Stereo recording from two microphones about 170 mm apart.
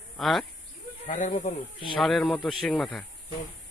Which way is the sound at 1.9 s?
Centre (ahead or behind).